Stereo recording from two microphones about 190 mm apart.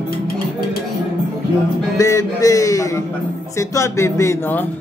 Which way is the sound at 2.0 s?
15° left (ahead or behind).